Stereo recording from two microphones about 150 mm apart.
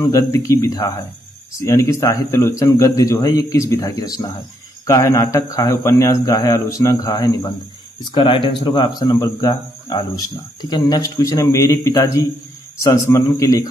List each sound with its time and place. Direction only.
0.1 s a man's voice: 20° left (ahead or behind)